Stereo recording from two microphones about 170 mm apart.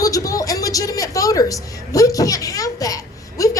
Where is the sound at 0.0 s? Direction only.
20° left (ahead or behind).